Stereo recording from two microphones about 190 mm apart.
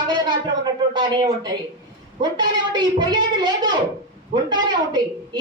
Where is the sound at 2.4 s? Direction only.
25° right (ahead or behind).